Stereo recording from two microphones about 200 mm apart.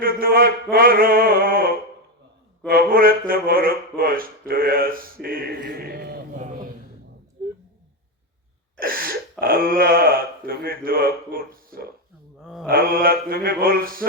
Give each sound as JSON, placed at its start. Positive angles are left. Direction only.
{"t": 0.0, "sound": "speech", "side_deg": -45}
{"t": 8.8, "sound": "speech", "side_deg": -45}
{"t": 12.4, "sound": "mantra", "side_deg": -5}
{"t": 12.6, "sound": "speech", "side_deg": -45}